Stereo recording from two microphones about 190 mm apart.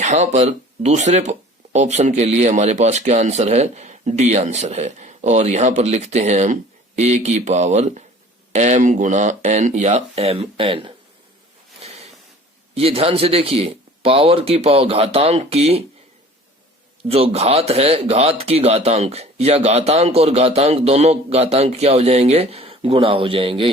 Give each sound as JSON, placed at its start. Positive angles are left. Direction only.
{"t": 0.0, "sound": "speech", "side_deg": -35}
{"t": 11.8, "sound": "a sound", "side_deg": -35}
{"t": 12.7, "sound": "speech", "side_deg": -30}
{"t": 17.1, "sound": "speech", "side_deg": -30}